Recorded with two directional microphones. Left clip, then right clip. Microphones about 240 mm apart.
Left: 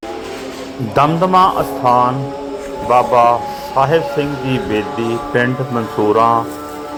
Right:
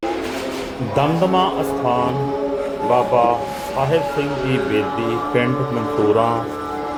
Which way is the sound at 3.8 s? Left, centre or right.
Centre.